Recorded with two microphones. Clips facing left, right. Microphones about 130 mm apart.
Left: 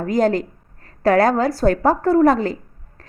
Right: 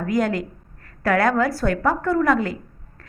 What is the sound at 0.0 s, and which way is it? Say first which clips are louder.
A woman's voice: left 4 dB; 30° left (ahead or behind).